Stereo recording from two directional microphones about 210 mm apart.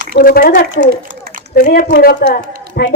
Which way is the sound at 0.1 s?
45° left (ahead or behind).